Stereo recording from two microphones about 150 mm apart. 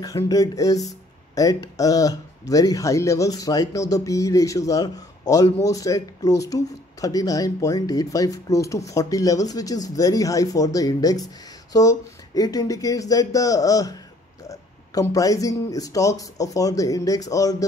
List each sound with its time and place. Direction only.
0.0 s speech: 25° left (ahead or behind)